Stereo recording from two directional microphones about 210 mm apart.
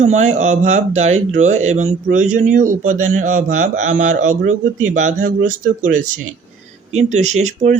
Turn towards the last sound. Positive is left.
turn(degrees=-35)  # may be behind; listen again after turning